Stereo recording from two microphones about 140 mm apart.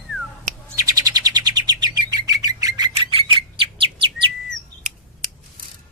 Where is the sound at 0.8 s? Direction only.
25° right (ahead or behind).